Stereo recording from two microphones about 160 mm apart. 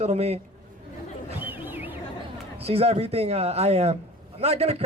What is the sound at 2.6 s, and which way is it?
A man's voice, 40° right (ahead or behind).